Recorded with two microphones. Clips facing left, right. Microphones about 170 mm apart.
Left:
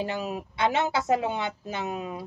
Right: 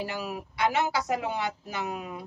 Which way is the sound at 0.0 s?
25° left (ahead or behind).